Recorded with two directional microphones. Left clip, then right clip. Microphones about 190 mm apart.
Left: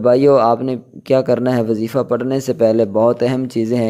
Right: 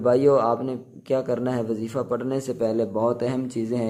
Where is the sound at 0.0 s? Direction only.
35° left (ahead or behind).